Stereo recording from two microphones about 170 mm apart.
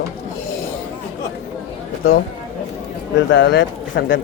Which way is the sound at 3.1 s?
90° left.